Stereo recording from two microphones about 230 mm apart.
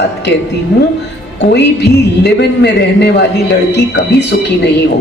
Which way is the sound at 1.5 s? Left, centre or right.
Left.